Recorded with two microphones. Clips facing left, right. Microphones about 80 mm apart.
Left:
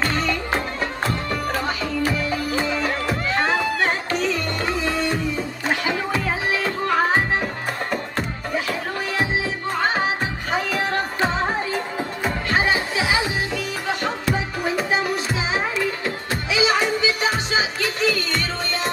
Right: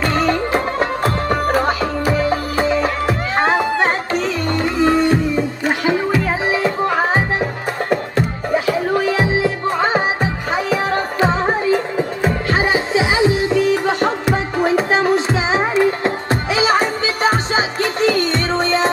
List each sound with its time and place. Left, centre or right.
0.1 s music: right
6.5 s music: right
12.2 s music: right